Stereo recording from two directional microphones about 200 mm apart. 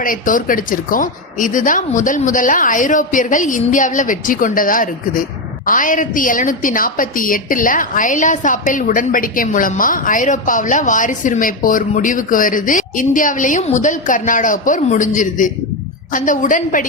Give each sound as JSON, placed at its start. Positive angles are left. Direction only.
{"t": 0.0, "sound": "a woman's voice", "side_deg": 45}